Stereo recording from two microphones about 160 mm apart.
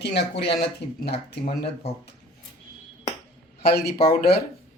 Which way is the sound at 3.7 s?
90° left.